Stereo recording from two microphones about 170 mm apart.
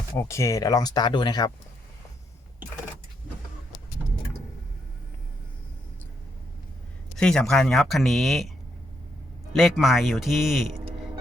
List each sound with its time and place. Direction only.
0.2 s speech: 15° left (ahead or behind)
7.2 s speech: 5° left (ahead or behind)
9.5 s speech: centre (ahead or behind)